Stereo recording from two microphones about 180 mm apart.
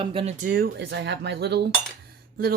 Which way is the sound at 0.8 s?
70° right (ahead or behind).